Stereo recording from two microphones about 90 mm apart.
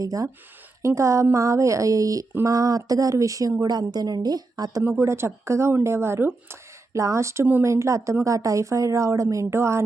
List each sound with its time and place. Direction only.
0.0 s a woman's voice: 40° right (ahead or behind)
4.8 s a woman's voice: 25° right (ahead or behind)